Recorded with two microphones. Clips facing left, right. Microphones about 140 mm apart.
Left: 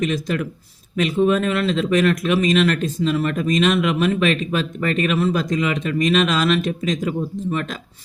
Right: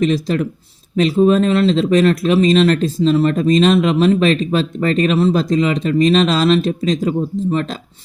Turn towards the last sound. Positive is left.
turn(degrees=-30)  # may be behind; listen again after turning